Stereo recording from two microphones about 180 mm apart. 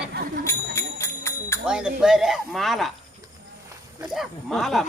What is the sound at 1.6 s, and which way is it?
Speech, 5° right (ahead or behind).